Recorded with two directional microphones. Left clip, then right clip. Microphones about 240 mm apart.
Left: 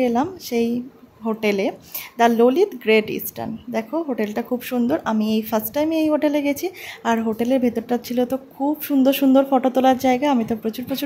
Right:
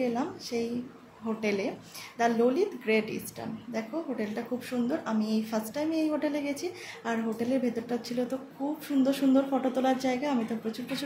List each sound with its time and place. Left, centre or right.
0.0 s speech: left